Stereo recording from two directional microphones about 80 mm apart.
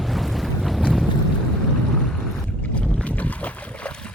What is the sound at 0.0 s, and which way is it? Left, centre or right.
Boat, centre.